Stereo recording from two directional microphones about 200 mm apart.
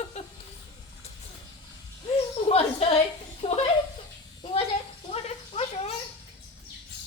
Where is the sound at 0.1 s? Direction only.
35° left (ahead or behind).